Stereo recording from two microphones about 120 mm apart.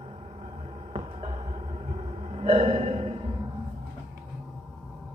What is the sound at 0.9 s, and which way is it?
Music, 55° right (ahead or behind).